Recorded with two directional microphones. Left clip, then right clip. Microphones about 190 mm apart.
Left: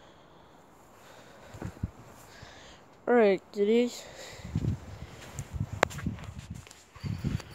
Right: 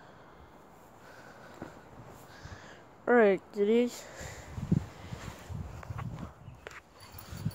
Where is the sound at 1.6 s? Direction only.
40° left (ahead or behind).